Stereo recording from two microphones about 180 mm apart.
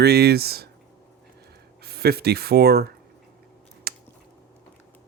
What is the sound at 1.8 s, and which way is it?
Speech, 60° right (ahead or behind).